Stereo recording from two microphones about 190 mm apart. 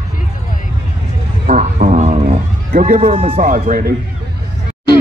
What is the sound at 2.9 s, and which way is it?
Speech, 30° right (ahead or behind).